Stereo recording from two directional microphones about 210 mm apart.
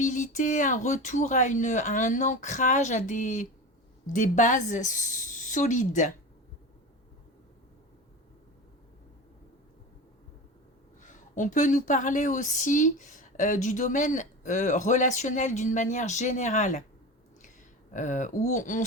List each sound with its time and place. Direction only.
0.0 s speech: 35° left (ahead or behind)
11.0 s speech: 35° left (ahead or behind)
17.9 s speech: 35° left (ahead or behind)